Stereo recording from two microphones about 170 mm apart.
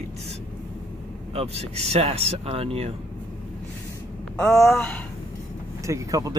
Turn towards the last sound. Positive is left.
turn(degrees=-20)  # may be behind; listen again after turning